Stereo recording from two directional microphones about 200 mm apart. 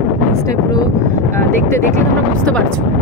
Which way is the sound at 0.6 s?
20° left (ahead or behind).